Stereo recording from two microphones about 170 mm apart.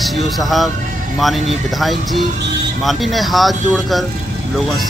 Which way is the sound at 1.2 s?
Centre (ahead or behind).